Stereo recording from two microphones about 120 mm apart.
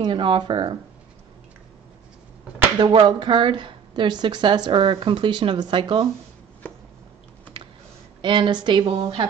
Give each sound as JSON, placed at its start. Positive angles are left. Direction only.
{"t": 0.0, "sound": "speech", "side_deg": -45}
{"t": 2.8, "sound": "speech", "side_deg": -40}
{"t": 8.2, "sound": "speech", "side_deg": -45}